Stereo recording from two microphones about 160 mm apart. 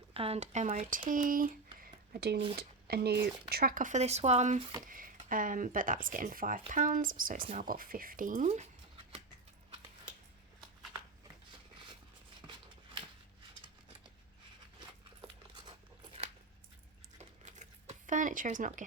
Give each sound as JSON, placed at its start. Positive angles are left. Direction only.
{"t": 0.1, "sound": "speech", "side_deg": -40}
{"t": 0.9, "sound": "speech", "side_deg": -60}
{"t": 1.8, "sound": "a sound", "side_deg": -75}
{"t": 2.6, "sound": "speech", "side_deg": -80}
{"t": 3.5, "sound": "speech", "side_deg": -65}
{"t": 4.9, "sound": "speech", "side_deg": -60}
{"t": 12.5, "sound": "a sound", "side_deg": -30}
{"t": 14.8, "sound": "a sound", "side_deg": -30}
{"t": 17.2, "sound": "computer keyboard", "side_deg": -50}